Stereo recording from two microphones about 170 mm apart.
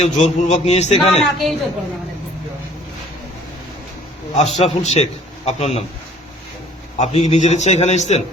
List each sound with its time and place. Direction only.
0.0 s a man's voice: 40° left (ahead or behind)
1.2 s a man's voice: centre (ahead or behind)
4.4 s a man's voice: 35° left (ahead or behind)
6.9 s a man's voice: 40° left (ahead or behind)